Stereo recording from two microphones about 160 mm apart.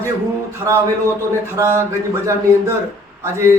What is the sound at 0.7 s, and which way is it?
Speech, 20° right (ahead or behind).